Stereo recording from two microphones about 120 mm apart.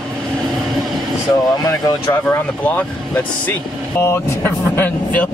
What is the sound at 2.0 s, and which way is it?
Speech, 20° left (ahead or behind).